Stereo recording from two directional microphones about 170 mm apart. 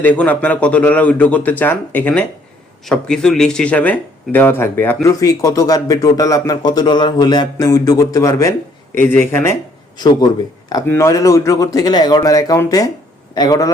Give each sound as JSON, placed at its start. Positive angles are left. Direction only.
{"t": 0.0, "sound": "speech", "side_deg": 10}
{"t": 5.2, "sound": "speech", "side_deg": 20}